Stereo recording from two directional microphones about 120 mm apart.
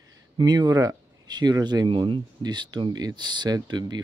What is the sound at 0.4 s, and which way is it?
Speech, 35° right (ahead or behind).